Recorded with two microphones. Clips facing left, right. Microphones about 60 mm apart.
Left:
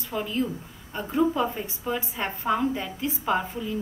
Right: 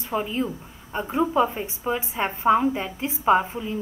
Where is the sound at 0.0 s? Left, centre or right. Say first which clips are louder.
Right 2 dB; right.